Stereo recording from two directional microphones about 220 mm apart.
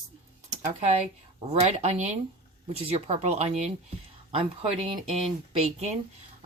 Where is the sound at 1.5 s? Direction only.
30° right (ahead or behind).